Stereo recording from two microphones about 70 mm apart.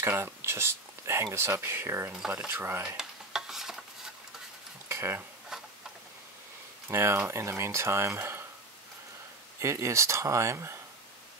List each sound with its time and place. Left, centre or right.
0.0 s speech: right
3.0 s stir: centre
4.8 s a sound: right
5.5 s tick-tock: centre
6.9 s speech: right
9.6 s speech: right